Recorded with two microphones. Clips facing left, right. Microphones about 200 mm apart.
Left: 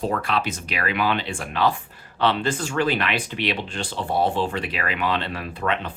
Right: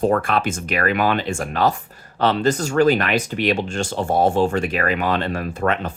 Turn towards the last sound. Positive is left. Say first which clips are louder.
# right 4 dB
turn(degrees=-45)  # may be behind; listen again after turning